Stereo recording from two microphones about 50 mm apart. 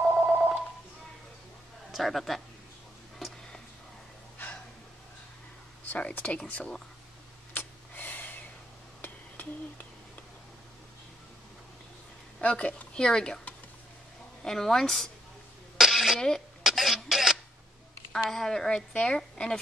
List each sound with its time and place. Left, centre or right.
0.0 s telephone: right
1.9 s speech: centre
5.9 s speech: left
7.5 s snort: left
12.4 s a woman's voice: left
12.9 s a woman's voice: centre
14.4 s a woman's voice: centre
15.8 s a sound: centre
16.2 s a woman's voice: centre
16.6 s a sound: centre
18.3 s a woman's voice: centre
18.9 s a woman's voice: left